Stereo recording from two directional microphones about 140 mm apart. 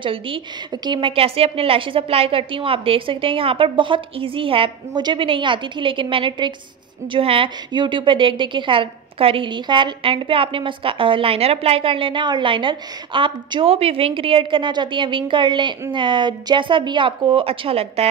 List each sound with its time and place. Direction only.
0.0 s a woman's voice: 40° right (ahead or behind)